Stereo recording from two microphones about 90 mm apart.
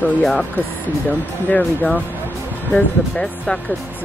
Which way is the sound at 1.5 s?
10° left (ahead or behind).